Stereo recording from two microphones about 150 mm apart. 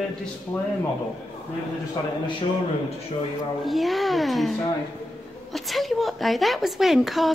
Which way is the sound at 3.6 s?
Centre (ahead or behind).